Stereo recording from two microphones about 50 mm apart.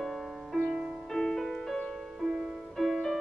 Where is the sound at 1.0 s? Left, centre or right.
Centre.